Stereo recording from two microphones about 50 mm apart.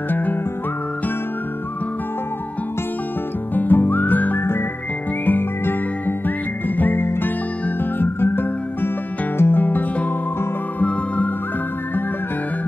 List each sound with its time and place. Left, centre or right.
0.1 s music: left
3.5 s music: left
5.2 s whistling: left
6.8 s music: left